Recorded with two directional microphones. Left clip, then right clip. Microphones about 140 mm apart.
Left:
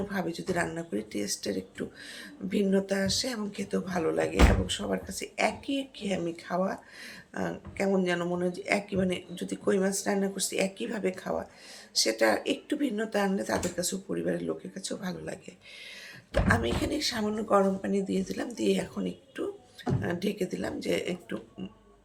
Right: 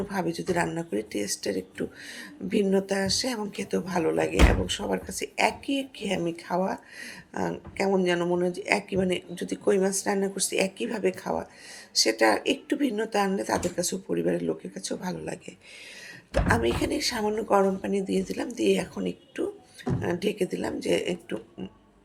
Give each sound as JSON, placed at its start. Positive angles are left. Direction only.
{"t": 0.1, "sound": "speech", "side_deg": -20}